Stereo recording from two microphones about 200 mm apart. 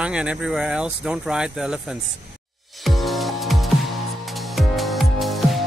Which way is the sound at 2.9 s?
Centre (ahead or behind).